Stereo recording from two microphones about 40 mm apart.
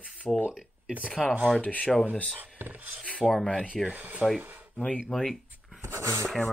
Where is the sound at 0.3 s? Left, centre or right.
Left.